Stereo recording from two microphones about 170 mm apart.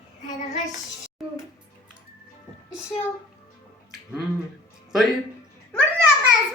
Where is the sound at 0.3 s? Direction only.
45° left (ahead or behind).